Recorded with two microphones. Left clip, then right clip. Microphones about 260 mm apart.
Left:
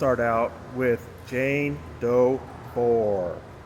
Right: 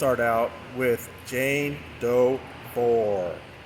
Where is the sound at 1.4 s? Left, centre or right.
Right.